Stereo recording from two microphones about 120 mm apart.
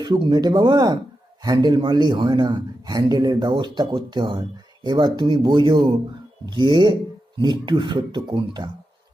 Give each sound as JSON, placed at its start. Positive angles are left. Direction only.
{"t": 0.0, "sound": "a man's voice", "side_deg": -35}